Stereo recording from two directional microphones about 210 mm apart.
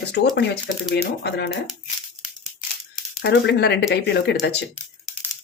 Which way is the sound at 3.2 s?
55° left (ahead or behind).